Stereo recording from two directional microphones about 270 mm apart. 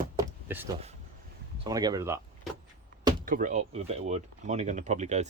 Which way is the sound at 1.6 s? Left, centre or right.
Centre.